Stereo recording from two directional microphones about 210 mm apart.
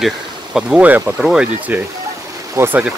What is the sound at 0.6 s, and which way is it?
Speech, 5° right (ahead or behind).